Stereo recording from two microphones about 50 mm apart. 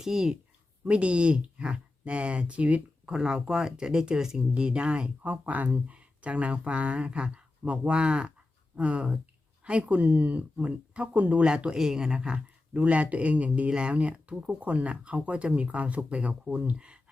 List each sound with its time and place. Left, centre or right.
0.0 s speech: centre
0.9 s speech: right
3.1 s speech: centre; by 11.4 s right
11.4 s speech: centre
12.7 s speech: right